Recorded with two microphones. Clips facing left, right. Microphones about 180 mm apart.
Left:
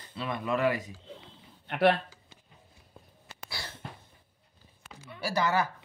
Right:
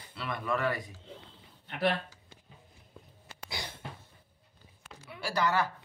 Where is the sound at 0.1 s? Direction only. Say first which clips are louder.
Left 2 dB; 20° left (ahead or behind).